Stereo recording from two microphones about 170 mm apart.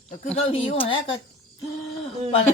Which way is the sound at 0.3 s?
35° left (ahead or behind).